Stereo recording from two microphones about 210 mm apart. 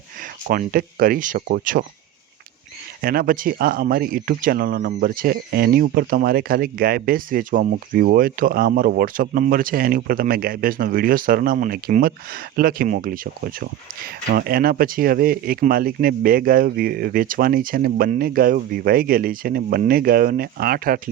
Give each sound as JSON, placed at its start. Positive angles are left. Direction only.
{"t": 0.4, "sound": "speech", "side_deg": -40}
{"t": 3.0, "sound": "speech", "side_deg": -45}